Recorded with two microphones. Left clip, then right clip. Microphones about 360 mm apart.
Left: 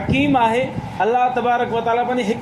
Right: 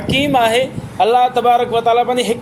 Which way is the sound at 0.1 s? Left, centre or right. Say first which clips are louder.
Right 3 dB; right.